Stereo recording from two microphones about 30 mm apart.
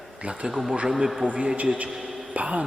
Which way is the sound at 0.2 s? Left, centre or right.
Right.